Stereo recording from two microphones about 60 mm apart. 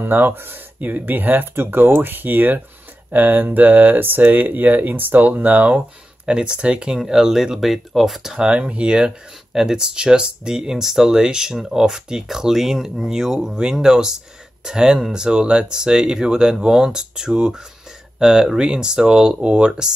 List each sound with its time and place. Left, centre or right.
0.0 s speech: right
6.2 s speech: centre